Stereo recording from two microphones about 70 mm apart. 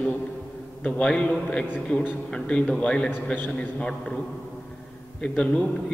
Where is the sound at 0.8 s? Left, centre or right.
Centre.